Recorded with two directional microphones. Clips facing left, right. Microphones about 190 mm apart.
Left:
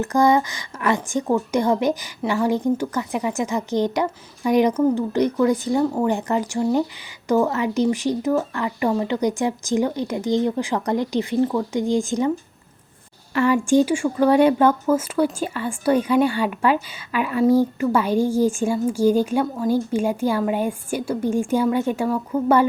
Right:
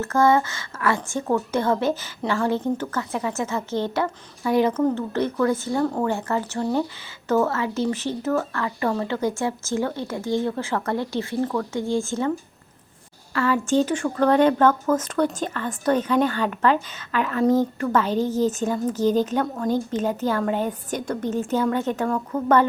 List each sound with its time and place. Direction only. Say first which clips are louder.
0.0 s speech: left 1 dB; 15° left (ahead or behind)
13.3 s speech: left 4 dB; 15° left (ahead or behind)